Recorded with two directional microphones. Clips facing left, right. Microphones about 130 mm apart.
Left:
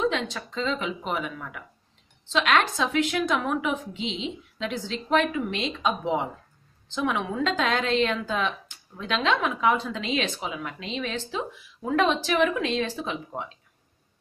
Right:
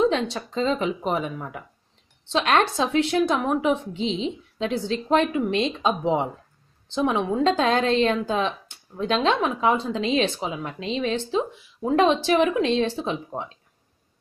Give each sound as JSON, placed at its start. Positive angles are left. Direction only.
{"t": 0.0, "sound": "a woman's voice", "side_deg": -35}